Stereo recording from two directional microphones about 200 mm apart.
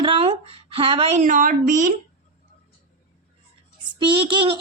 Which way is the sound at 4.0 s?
25° right (ahead or behind).